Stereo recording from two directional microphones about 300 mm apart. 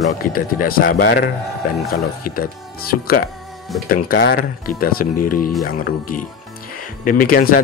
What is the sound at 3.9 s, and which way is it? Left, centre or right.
Speech, left.